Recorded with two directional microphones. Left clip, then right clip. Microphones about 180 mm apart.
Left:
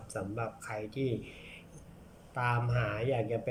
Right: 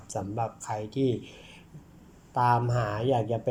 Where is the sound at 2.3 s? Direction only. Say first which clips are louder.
Right 8 dB; 20° right (ahead or behind).